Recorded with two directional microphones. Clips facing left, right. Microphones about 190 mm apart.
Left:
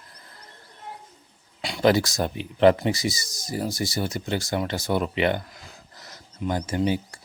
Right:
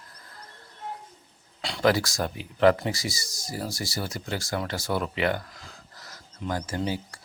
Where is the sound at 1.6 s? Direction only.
15° left (ahead or behind).